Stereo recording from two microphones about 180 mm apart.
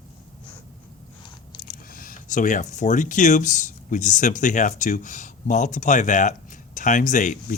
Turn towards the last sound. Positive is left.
turn(degrees=45)  # may be behind; listen again after turning